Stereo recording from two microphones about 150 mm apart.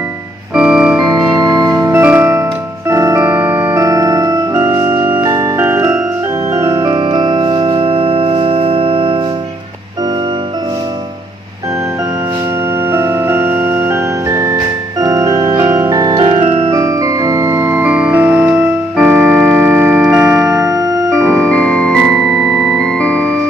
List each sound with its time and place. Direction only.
0.6 s organ: 5° right (ahead or behind)
1.1 s music: 25° right (ahead or behind)
6.5 s organ: 20° right (ahead or behind)
6.9 s music: 35° right (ahead or behind)
12.9 s music: 15° right (ahead or behind); by 16.7 s 40° right (ahead or behind)
16.7 s music: 25° right (ahead or behind); by 20.6 s 5° right (ahead or behind)
20.6 s organ: 20° right (ahead or behind)
21.5 s music: 5° left (ahead or behind)